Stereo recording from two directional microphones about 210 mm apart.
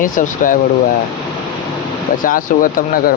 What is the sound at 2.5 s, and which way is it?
Speech, 40° left (ahead or behind).